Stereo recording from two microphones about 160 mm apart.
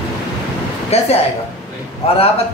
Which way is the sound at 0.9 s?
40° left (ahead or behind).